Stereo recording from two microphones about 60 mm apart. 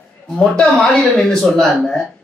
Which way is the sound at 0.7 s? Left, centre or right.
Centre.